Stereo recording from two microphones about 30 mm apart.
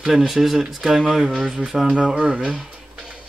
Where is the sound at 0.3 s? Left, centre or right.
Centre.